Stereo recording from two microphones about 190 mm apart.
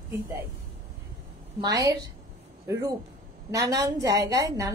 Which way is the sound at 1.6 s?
20° right (ahead or behind).